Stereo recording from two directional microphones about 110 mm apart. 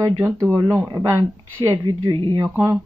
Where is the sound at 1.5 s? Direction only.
45° right (ahead or behind).